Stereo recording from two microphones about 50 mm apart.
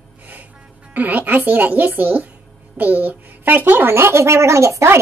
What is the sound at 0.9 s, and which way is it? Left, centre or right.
A child's voice, right.